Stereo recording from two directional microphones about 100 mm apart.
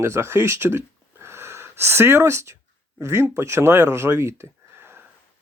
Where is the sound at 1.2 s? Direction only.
25° right (ahead or behind).